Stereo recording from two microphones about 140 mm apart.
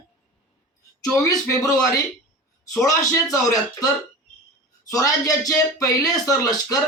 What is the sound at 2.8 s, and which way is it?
Speech, 25° left (ahead or behind).